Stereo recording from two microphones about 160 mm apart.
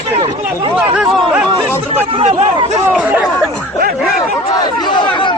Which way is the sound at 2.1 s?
35° right (ahead or behind).